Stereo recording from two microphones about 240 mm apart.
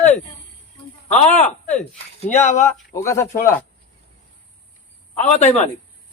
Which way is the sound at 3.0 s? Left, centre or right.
Centre.